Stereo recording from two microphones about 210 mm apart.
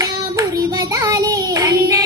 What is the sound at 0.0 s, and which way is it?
Child singing, 15° right (ahead or behind).